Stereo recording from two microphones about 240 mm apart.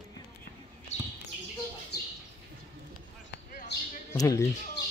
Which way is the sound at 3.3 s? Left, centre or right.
Left.